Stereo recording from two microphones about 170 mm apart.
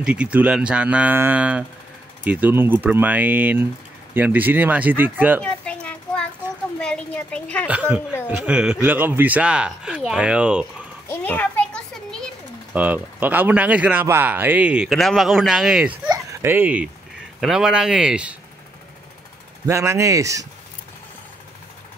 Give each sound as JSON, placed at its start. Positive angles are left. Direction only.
{"t": 0.0, "sound": "speech", "side_deg": -5}
{"t": 5.4, "sound": "a sound", "side_deg": 5}
{"t": 6.8, "sound": "speech", "side_deg": 5}
{"t": 7.6, "sound": "speech", "side_deg": -10}
{"t": 11.1, "sound": "a sound", "side_deg": 10}
{"t": 12.7, "sound": "speech", "side_deg": -10}
{"t": 19.6, "sound": "speech", "side_deg": -20}